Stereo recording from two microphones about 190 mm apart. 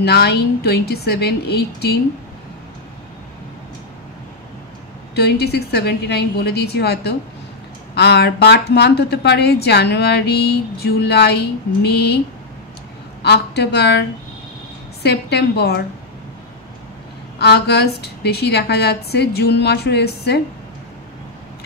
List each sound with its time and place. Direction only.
0.0 s speech: 60° left (ahead or behind)
5.1 s speech: 60° left (ahead or behind)
13.2 s speech: 60° left (ahead or behind)
15.0 s speech: 60° left (ahead or behind)
17.4 s speech: 60° left (ahead or behind)